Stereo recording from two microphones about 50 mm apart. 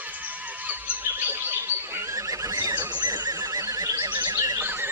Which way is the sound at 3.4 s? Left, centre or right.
Right.